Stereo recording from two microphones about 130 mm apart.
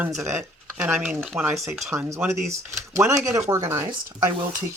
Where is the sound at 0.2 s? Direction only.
20° right (ahead or behind).